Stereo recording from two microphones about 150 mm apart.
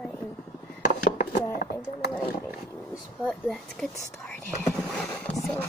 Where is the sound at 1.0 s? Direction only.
60° left (ahead or behind).